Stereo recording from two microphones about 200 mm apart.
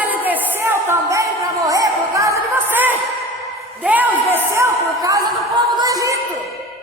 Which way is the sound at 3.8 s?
10° right (ahead or behind).